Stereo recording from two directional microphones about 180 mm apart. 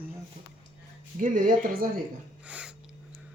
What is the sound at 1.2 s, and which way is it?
Speech, 50° right (ahead or behind).